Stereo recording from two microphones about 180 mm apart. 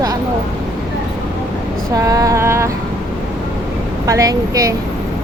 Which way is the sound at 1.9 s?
20° right (ahead or behind).